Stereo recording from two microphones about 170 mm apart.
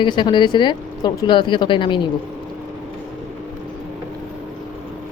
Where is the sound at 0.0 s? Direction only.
25° left (ahead or behind).